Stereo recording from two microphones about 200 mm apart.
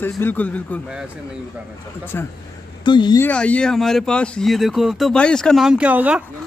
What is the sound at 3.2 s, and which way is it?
A man's voice, 5° left (ahead or behind).